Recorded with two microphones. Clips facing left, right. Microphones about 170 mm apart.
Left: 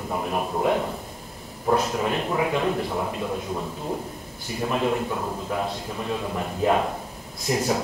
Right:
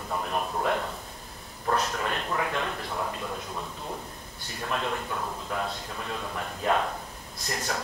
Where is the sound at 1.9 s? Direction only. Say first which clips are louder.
Left 6 dB; 15° left (ahead or behind).